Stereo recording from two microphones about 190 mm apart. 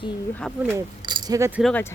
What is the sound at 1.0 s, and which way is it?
Keys jangling, 20° right (ahead or behind).